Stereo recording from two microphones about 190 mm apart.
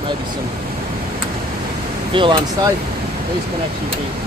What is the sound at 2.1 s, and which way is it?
Speech, 25° right (ahead or behind).